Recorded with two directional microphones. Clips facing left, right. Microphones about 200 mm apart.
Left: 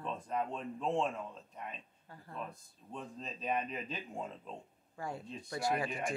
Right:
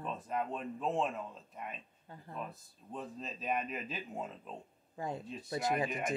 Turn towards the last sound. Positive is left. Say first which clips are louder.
# right 1 dB
turn(degrees=-20)  # may be behind; listen again after turning